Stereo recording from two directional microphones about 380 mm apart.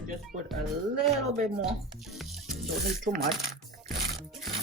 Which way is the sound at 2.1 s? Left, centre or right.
Centre.